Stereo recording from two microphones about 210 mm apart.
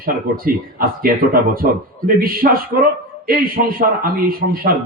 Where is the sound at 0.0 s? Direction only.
45° right (ahead or behind).